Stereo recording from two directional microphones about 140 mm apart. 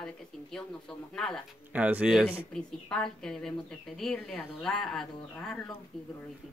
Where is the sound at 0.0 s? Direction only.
5° left (ahead or behind).